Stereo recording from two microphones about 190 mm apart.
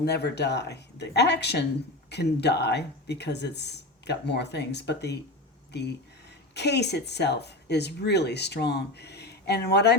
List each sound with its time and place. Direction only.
0.0 s speech: 60° left (ahead or behind)